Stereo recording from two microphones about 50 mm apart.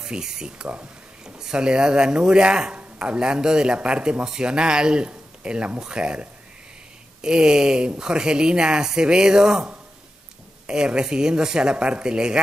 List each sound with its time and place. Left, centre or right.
0.0 s speech: centre